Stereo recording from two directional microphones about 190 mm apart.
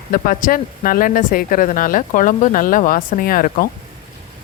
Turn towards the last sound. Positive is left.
turn(degrees=50)  # may be behind; listen again after turning